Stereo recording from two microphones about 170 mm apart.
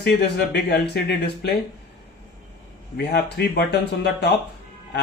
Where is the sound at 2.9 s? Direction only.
75° left (ahead or behind).